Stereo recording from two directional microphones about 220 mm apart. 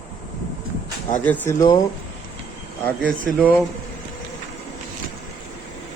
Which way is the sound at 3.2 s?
5° left (ahead or behind).